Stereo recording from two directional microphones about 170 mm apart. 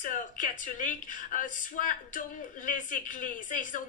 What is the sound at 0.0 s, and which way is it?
Speech, 50° left (ahead or behind).